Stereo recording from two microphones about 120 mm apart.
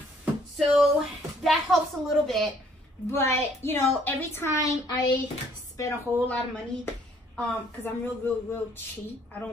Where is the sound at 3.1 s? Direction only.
20° left (ahead or behind).